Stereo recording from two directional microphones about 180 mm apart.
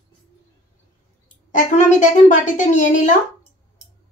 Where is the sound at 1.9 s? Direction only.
45° left (ahead or behind).